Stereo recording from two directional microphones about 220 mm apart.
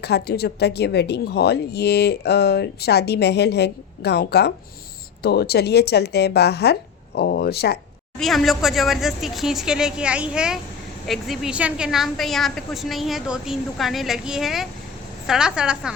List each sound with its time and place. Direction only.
0.0 s speech: 45° left (ahead or behind)
8.2 s a woman's voice: centre (ahead or behind)